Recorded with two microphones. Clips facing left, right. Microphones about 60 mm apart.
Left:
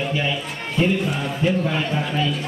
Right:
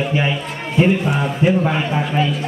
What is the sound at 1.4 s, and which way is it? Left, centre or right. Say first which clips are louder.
Speech: right 4 dB; right.